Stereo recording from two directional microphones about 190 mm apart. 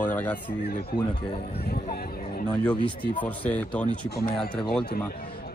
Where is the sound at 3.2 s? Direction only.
10° left (ahead or behind).